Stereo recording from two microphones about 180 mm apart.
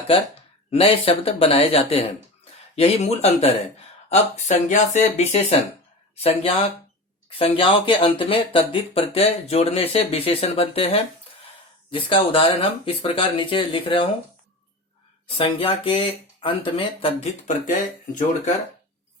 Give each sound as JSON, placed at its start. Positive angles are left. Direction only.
{"t": 0.1, "sound": "speech", "side_deg": 30}
{"t": 7.3, "sound": "speech", "side_deg": 30}
{"t": 15.4, "sound": "speech", "side_deg": 30}